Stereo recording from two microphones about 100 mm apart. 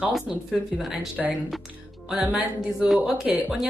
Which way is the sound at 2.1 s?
10° right (ahead or behind).